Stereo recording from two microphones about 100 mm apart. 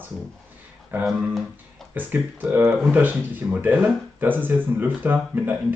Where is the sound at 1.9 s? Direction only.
20° right (ahead or behind).